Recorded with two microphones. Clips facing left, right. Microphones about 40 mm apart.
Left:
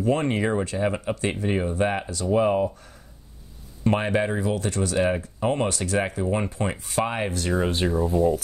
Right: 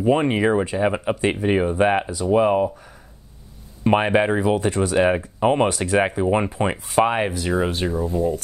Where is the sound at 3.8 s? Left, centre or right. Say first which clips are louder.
Right 5 dB; right.